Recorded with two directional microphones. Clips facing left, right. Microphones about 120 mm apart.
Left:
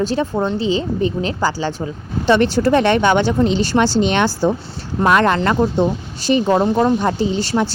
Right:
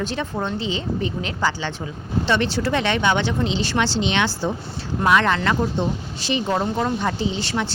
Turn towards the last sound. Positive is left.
turn(degrees=40)  # may be behind; listen again after turning